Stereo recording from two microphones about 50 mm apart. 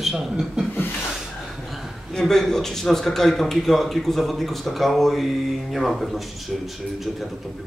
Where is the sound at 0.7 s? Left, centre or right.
Left.